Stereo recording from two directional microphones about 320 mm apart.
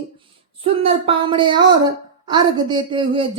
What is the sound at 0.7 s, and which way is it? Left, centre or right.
Music, centre.